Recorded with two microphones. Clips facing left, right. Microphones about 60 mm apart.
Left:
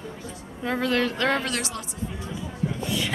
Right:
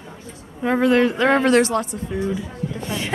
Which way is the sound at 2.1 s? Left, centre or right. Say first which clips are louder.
Right 13 dB; right.